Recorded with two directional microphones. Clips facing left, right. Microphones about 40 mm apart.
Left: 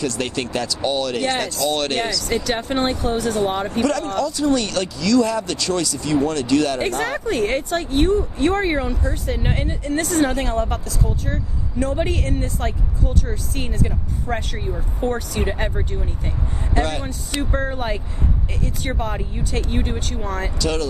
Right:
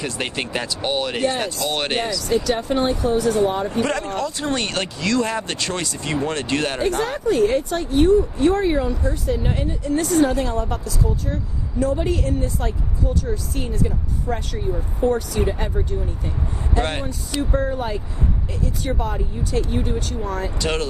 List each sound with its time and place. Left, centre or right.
0.0 s speech: right
2.3 s speech: left
3.8 s speech: right
7.0 s speech: left
16.8 s speech: right
17.3 s speech: left
20.6 s speech: right